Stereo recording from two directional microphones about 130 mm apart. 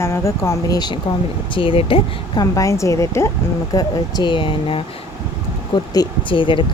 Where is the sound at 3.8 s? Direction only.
35° left (ahead or behind).